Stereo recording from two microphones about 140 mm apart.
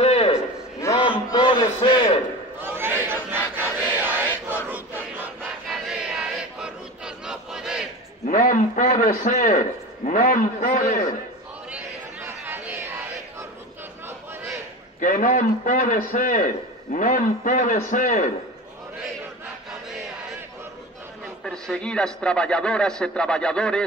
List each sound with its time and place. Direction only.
0.0 s a sound: 45° left (ahead or behind)
1.3 s a man's voice: 35° left (ahead or behind)
2.6 s crowd: 15° right (ahead or behind)
4.6 s battle cry: 15° right (ahead or behind)
5.7 s crowd: 5° right (ahead or behind)
7.2 s battle cry: 5° right (ahead or behind)
8.3 s a man's voice: 70° left (ahead or behind)
11.7 s chatter: 15° right (ahead or behind)
15.0 s a man's voice: 70° left (ahead or behind)
21.5 s a man's voice: 5° left (ahead or behind)